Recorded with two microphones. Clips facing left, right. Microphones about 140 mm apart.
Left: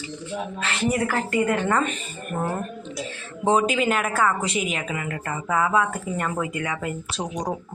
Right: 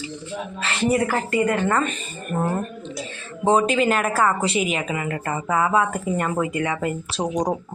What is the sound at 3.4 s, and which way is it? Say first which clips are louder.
A woman's voice: right 2 dB; 10° left (ahead or behind).